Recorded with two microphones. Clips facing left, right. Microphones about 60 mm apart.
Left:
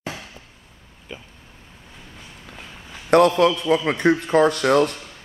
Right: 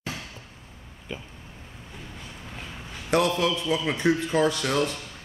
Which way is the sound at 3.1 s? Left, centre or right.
Left.